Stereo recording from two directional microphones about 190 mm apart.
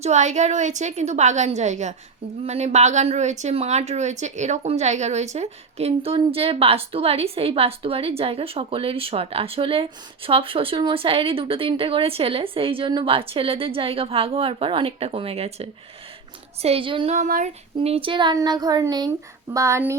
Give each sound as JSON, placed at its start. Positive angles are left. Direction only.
{"t": 0.0, "sound": "a woman's voice", "side_deg": -35}
{"t": 17.2, "sound": "a woman's voice", "side_deg": -45}